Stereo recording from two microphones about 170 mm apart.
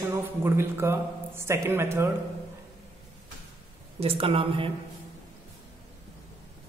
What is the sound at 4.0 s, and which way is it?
Speech, 35° right (ahead or behind).